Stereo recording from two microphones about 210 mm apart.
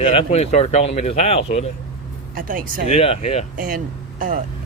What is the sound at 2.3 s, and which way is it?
Speech, 40° right (ahead or behind).